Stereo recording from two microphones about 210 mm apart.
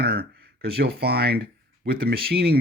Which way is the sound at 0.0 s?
50° right (ahead or behind).